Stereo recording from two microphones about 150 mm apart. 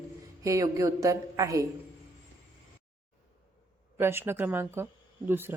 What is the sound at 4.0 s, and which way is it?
A woman's voice, 15° right (ahead or behind).